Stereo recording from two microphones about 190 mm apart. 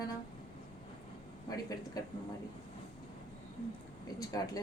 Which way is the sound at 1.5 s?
20° left (ahead or behind).